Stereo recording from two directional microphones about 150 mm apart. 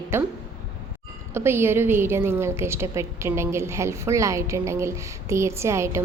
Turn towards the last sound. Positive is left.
turn(degrees=-20)  # may be behind; listen again after turning